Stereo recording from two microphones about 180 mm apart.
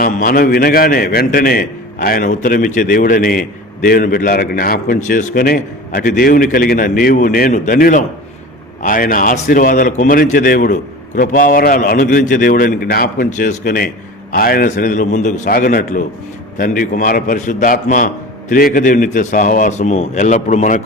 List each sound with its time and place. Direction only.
0.0 s a man's voice: 50° left (ahead or behind)